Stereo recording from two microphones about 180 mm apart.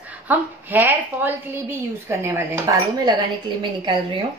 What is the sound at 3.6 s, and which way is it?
Speech, 25° right (ahead or behind).